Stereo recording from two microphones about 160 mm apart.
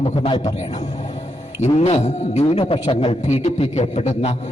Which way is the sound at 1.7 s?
45° left (ahead or behind).